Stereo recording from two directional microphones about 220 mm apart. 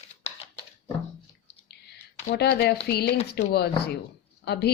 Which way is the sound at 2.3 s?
50° left (ahead or behind).